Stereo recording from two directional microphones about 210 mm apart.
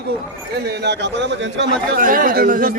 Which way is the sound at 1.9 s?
40° right (ahead or behind).